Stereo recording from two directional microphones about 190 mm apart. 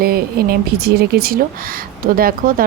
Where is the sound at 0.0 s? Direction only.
55° right (ahead or behind).